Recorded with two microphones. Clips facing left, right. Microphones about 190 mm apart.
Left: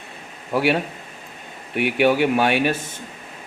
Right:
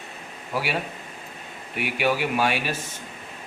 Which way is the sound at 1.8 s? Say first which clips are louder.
Left 7 dB; 60° left (ahead or behind).